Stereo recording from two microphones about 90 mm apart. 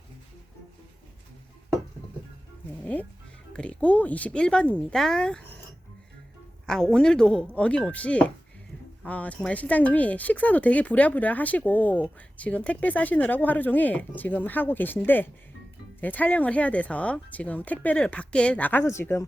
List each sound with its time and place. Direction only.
2.8 s speech: 15° left (ahead or behind)
6.7 s speech: 5° left (ahead or behind); by 19.2 s 30° left (ahead or behind)